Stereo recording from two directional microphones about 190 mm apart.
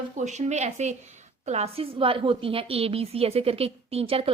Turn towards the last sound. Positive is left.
turn(degrees=-30)  # may be behind; listen again after turning